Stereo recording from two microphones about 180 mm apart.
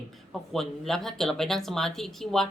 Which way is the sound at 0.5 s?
Centre (ahead or behind).